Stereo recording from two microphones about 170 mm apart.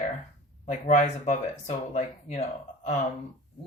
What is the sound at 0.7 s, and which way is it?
Speech, 45° left (ahead or behind).